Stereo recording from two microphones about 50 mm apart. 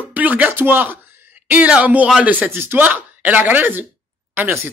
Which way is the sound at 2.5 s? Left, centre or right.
Right.